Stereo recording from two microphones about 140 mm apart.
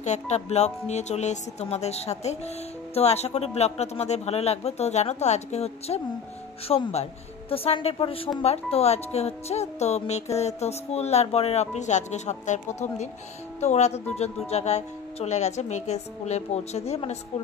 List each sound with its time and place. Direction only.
0.0 s speech: 55° left (ahead or behind)